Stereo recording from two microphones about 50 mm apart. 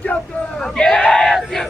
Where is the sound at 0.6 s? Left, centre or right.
Centre.